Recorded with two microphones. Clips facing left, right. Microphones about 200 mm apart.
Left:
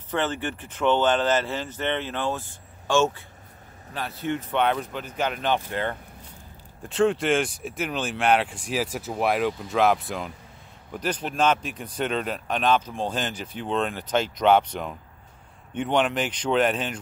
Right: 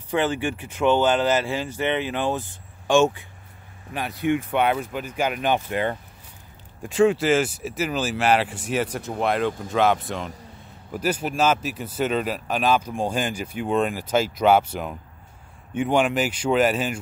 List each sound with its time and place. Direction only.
0.1 s speech: 10° right (ahead or behind)